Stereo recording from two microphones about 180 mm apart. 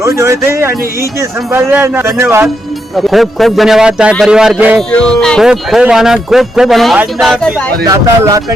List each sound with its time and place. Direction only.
0.0 s speech: 15° right (ahead or behind)
3.1 s speech: centre (ahead or behind)
4.9 s speech: 5° left (ahead or behind)
7.9 s speech: 20° right (ahead or behind)